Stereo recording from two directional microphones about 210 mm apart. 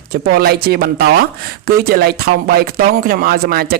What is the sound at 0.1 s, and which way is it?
Speech, 45° right (ahead or behind).